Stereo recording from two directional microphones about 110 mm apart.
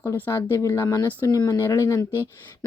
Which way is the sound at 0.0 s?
25° left (ahead or behind).